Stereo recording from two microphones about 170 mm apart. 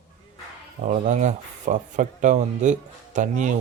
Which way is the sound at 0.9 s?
45° right (ahead or behind).